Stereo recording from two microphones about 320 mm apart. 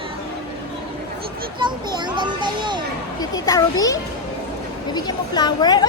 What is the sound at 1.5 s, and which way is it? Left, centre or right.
Children playing, centre.